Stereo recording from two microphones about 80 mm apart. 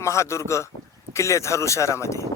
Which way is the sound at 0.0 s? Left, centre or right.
Left.